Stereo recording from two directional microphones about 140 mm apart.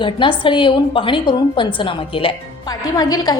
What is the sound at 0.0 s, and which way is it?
A woman's voice, 35° left (ahead or behind).